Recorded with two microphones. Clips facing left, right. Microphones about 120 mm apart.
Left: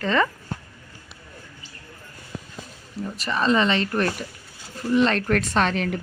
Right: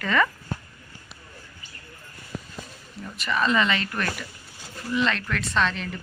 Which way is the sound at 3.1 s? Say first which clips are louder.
Left 2 dB; 35° left (ahead or behind).